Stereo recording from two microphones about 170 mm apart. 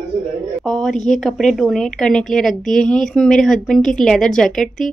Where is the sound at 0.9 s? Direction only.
45° left (ahead or behind).